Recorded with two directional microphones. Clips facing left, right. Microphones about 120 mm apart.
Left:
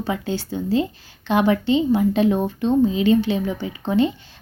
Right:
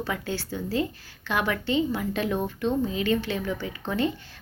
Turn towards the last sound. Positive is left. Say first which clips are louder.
# left 7 dB
turn(degrees=20)  # may be behind; listen again after turning